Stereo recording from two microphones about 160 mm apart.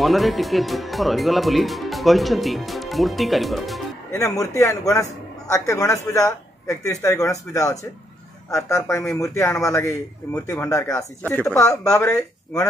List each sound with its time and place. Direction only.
0.0 s speech: centre (ahead or behind)
4.1 s speech: 20° left (ahead or behind)